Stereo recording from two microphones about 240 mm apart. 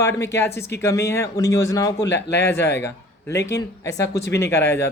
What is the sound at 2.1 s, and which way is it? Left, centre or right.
Speech, left.